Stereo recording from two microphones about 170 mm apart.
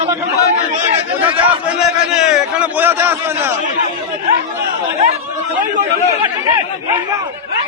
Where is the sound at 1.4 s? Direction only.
5° right (ahead or behind).